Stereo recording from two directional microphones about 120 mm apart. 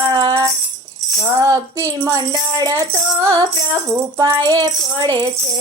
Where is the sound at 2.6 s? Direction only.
35° right (ahead or behind).